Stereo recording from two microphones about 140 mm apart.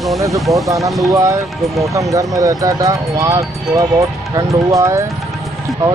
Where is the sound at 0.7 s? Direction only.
25° right (ahead or behind).